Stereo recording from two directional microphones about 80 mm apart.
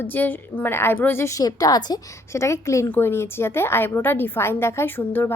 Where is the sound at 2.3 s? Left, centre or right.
Left.